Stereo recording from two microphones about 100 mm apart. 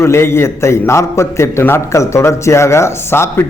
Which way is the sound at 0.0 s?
25° left (ahead or behind).